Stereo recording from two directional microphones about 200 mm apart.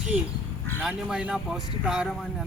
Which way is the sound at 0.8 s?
5° right (ahead or behind).